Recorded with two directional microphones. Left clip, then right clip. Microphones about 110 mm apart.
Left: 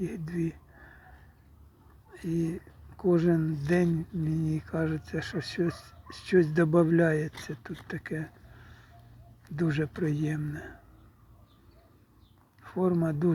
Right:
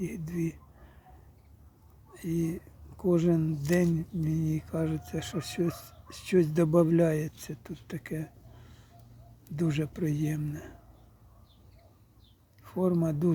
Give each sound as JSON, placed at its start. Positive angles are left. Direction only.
{"t": 0.0, "sound": "speech", "side_deg": -20}
{"t": 2.1, "sound": "speech", "side_deg": -15}
{"t": 9.6, "sound": "speech", "side_deg": -15}
{"t": 12.6, "sound": "speech", "side_deg": -20}